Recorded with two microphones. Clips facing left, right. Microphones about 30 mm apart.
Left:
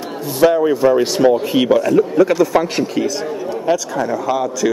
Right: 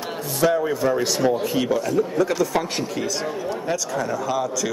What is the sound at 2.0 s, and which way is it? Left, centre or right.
Speech, left.